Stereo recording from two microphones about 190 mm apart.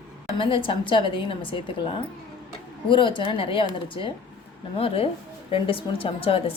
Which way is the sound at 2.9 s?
25° left (ahead or behind).